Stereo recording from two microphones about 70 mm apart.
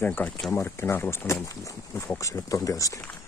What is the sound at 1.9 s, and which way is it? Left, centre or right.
Speech, left.